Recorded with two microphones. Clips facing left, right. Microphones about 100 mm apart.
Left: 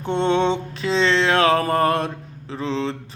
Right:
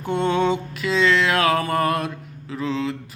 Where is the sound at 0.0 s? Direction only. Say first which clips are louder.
Left 1 dB; 25° left (ahead or behind).